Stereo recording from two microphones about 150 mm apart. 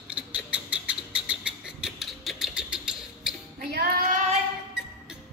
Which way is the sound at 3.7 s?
90° right.